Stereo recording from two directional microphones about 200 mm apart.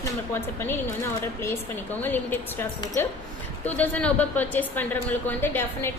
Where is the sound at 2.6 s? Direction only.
10° left (ahead or behind).